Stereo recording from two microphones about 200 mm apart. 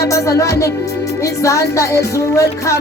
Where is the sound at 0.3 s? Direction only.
15° left (ahead or behind).